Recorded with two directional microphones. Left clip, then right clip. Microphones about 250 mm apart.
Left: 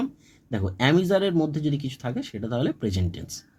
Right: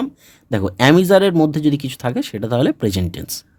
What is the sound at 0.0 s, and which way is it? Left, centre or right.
Speech, right.